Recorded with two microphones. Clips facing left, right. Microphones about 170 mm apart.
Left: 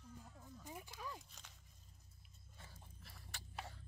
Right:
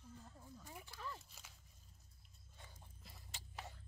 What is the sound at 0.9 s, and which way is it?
Speech, 15° left (ahead or behind).